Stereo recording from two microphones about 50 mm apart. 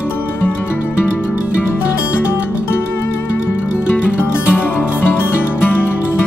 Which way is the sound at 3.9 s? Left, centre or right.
Left.